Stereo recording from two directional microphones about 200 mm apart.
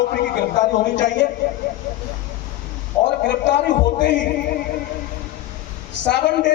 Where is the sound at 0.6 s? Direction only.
40° left (ahead or behind).